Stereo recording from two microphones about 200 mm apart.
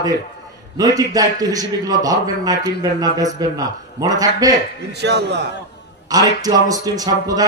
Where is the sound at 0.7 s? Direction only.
20° right (ahead or behind).